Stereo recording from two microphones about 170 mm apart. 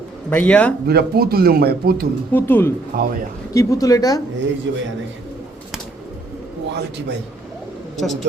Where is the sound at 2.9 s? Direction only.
60° right (ahead or behind).